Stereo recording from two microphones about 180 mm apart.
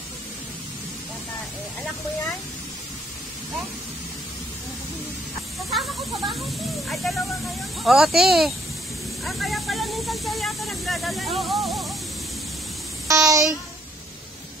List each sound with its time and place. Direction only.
5.7 s speech: centre (ahead or behind)
9.2 s spray: centre (ahead or behind)
13.1 s a sound: 20° right (ahead or behind)